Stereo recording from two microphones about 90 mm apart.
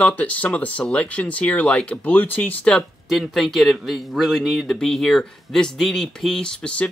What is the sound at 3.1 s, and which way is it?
A man's voice, centre (ahead or behind).